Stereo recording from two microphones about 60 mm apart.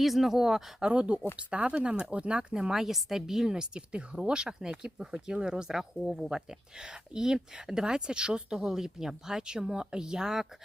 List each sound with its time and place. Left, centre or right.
0.0 s speech: centre
0.9 s speech: centre
6.2 s speech: centre